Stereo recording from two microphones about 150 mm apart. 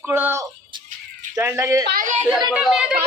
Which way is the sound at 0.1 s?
15° right (ahead or behind).